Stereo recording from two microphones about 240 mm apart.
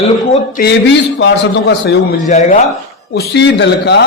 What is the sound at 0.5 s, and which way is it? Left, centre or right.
Speech, left.